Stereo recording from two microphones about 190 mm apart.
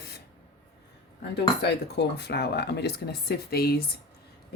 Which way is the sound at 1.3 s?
60° left (ahead or behind).